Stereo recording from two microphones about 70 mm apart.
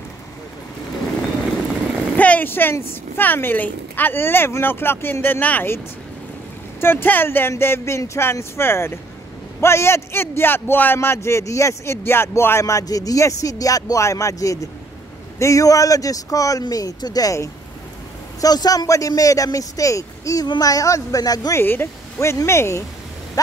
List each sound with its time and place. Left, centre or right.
2.1 s a woman's voice: left
6.8 s a man's voice: left
20.4 s speech: left
21.5 s a man's voice: left